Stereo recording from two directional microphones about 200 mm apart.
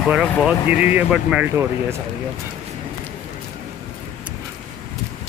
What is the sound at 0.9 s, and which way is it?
Speech, 5° right (ahead or behind).